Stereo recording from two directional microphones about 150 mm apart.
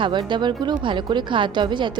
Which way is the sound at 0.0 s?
30° right (ahead or behind).